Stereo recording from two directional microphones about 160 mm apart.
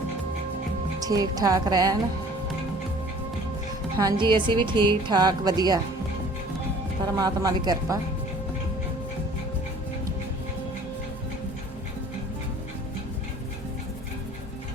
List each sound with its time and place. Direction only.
0.9 s a woman's voice: 25° right (ahead or behind)
3.9 s a woman's voice: 25° right (ahead or behind)
7.2 s a woman's voice: 25° right (ahead or behind)